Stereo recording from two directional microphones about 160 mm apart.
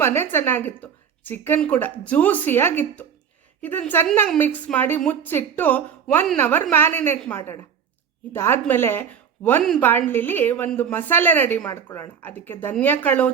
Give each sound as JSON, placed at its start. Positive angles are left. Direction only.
{"t": 0.0, "sound": "a woman's voice", "side_deg": 15}